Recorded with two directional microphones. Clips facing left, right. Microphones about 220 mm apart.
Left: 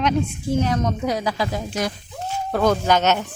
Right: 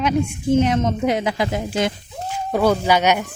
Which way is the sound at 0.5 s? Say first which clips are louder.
Right 4 dB; 20° right (ahead or behind).